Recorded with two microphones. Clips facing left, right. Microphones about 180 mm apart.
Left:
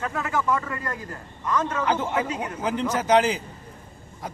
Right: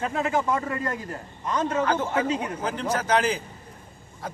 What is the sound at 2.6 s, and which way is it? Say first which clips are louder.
Speech: left 4 dB; 20° left (ahead or behind).